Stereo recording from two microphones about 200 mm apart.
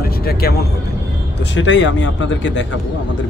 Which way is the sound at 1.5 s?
65° left (ahead or behind).